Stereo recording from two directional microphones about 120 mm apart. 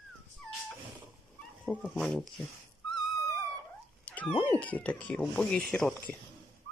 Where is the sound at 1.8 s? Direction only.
5° left (ahead or behind).